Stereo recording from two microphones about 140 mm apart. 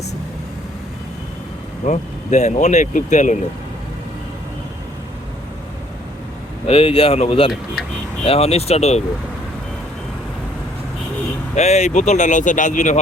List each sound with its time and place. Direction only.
1.9 s speech: 55° left (ahead or behind)
6.7 s speech: 45° left (ahead or behind)
11.5 s speech: 55° left (ahead or behind)